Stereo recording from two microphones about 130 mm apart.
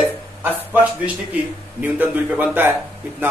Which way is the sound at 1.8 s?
15° right (ahead or behind).